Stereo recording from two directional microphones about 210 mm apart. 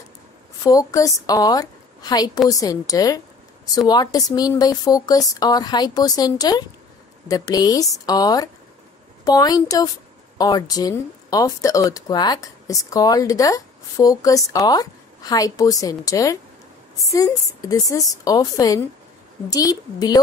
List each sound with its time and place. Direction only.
0.7 s speech: 15° left (ahead or behind)